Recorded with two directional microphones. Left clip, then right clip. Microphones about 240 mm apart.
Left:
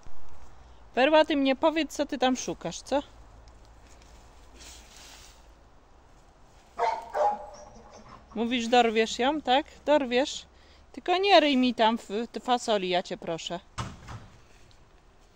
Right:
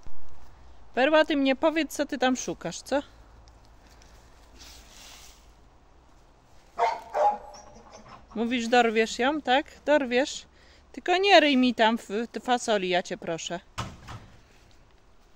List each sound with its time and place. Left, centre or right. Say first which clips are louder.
0.9 s speech: even; centre
6.8 s dog: right 2 dB; right
7.9 s a sound: right 1 dB; right
8.4 s speech: even; centre